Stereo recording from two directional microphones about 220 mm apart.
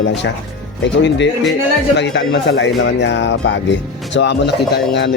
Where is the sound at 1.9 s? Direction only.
50° left (ahead or behind).